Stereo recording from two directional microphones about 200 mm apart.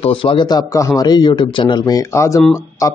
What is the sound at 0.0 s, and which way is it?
Speech, 25° left (ahead or behind).